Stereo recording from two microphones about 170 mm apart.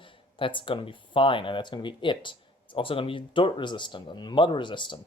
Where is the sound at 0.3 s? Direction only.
30° left (ahead or behind).